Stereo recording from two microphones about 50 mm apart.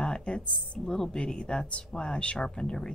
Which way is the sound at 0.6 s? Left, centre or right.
Centre.